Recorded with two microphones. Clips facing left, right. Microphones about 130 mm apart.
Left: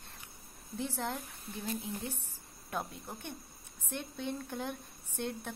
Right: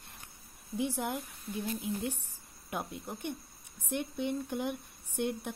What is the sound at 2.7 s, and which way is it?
A woman's voice, 15° right (ahead or behind).